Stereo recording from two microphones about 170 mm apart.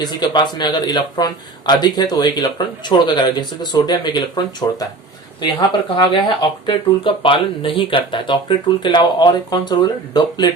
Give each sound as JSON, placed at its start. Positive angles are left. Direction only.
{"t": 0.0, "sound": "speech", "side_deg": 25}